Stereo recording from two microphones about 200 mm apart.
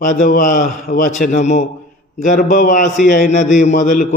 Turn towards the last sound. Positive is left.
turn(degrees=40)  # may be behind; listen again after turning